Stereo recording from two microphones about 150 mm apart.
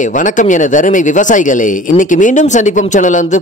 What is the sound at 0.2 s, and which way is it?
Speech, 55° left (ahead or behind).